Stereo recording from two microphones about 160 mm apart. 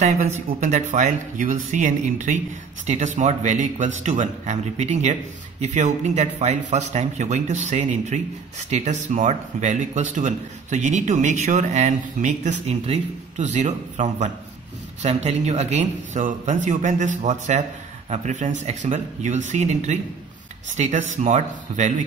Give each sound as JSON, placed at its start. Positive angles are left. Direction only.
{"t": 0.0, "sound": "speech", "side_deg": -45}